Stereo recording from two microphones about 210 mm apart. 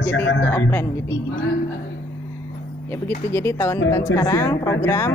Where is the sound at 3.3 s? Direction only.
10° left (ahead or behind).